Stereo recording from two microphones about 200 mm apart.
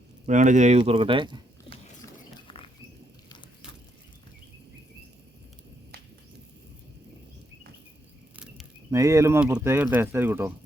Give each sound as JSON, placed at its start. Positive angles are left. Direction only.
{"t": 0.3, "sound": "speech", "side_deg": -40}
{"t": 8.9, "sound": "speech", "side_deg": -15}